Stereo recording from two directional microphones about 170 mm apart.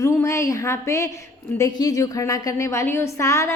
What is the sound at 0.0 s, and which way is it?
A woman's voice, 15° left (ahead or behind).